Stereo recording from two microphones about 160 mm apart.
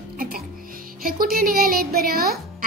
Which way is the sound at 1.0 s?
65° right (ahead or behind).